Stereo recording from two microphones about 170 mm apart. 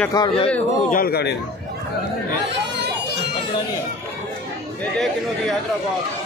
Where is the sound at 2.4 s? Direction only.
90° right.